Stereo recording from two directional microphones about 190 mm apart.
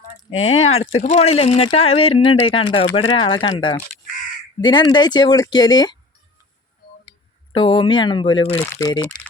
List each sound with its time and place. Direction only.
0.7 s speech: 30° left (ahead or behind)
7.5 s speech: 25° left (ahead or behind)
8.5 s speech: 15° left (ahead or behind)